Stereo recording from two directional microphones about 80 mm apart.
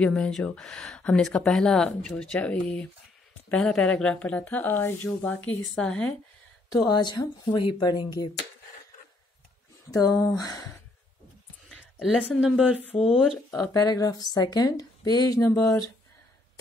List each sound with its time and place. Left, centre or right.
0.0 s a woman's voice: centre
5.6 s speech: centre
5.9 s a woman's voice: centre
6.7 s speech: left
9.8 s speech: left
12.0 s speech: centre
13.6 s a woman's voice: left